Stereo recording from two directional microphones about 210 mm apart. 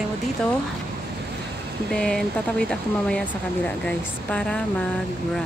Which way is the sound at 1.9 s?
5° left (ahead or behind).